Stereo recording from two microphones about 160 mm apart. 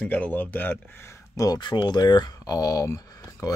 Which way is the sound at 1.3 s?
20° left (ahead or behind).